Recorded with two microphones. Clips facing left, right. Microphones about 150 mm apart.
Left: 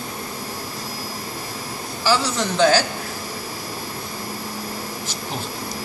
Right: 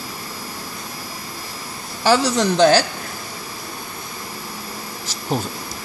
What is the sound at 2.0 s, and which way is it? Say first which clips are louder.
Speech: right 4 dB; 50° right (ahead or behind).